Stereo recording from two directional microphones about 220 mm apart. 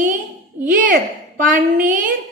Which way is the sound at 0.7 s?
40° right (ahead or behind).